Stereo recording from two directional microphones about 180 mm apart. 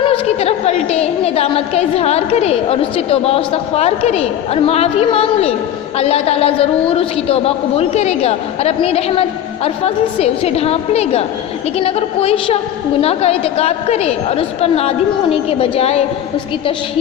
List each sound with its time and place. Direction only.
0.0 s a woman's voice: 35° left (ahead or behind)